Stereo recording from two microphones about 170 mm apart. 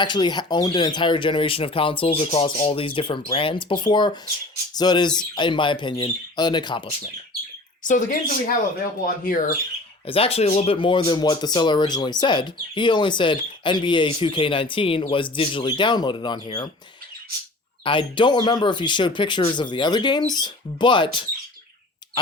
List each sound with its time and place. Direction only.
0.0 s speech: 25° left (ahead or behind)
7.9 s speech: 50° left (ahead or behind)
10.1 s speech: 35° left (ahead or behind)
17.8 s speech: 30° left (ahead or behind)